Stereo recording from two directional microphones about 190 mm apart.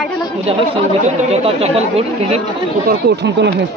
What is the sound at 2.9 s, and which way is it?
Speech, 60° right (ahead or behind).